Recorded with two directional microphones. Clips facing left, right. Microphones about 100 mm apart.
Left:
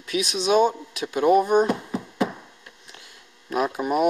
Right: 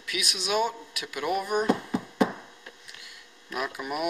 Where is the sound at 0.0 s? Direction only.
30° left (ahead or behind).